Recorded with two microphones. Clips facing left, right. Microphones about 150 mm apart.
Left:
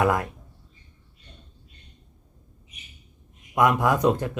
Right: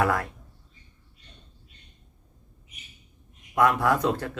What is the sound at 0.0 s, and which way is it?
Speech, 20° left (ahead or behind).